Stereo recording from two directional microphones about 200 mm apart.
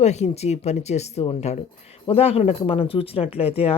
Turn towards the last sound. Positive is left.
turn(degrees=30)  # may be behind; listen again after turning